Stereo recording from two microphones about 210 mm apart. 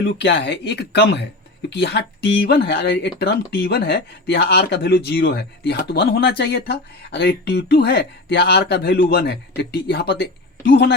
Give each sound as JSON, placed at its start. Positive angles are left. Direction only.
{"t": 0.0, "sound": "speech", "side_deg": 55}